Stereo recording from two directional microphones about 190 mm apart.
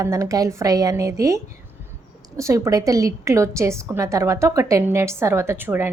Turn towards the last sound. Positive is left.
turn(degrees=-10)  # may be behind; listen again after turning